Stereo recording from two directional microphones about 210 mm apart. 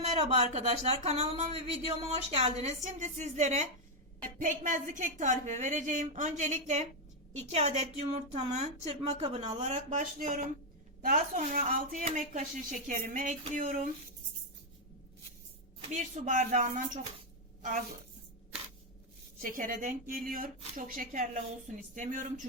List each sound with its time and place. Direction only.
0.0 s speech: 30° right (ahead or behind)
15.9 s a woman's voice: 35° right (ahead or behind)
19.4 s speech: 40° right (ahead or behind)